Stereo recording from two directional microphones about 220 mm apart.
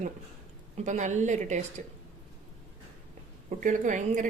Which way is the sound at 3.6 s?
35° right (ahead or behind).